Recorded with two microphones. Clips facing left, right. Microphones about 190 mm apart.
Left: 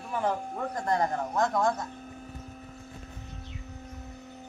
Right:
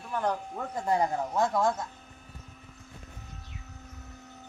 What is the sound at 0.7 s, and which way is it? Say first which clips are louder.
Speech: right 1 dB; 10° right (ahead or behind).